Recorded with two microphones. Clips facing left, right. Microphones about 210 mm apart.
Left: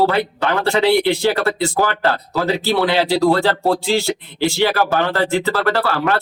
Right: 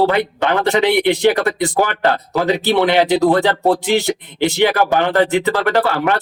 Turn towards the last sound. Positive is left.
turn(degrees=-20)  # may be behind; listen again after turning